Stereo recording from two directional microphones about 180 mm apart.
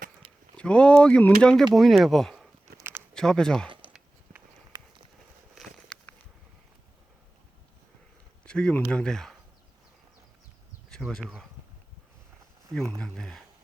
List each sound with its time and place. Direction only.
0.5 s speech: 5° left (ahead or behind)
3.7 s a sound: 30° right (ahead or behind)
3.9 s a sound: 10° right (ahead or behind)
4.7 s clip-clop: 20° right (ahead or behind)
8.4 s speech: 5° left (ahead or behind)
10.8 s speech: 5° left (ahead or behind)
12.7 s speech: 5° left (ahead or behind)